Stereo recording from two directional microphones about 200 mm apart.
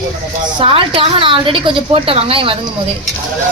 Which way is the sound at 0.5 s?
25° right (ahead or behind).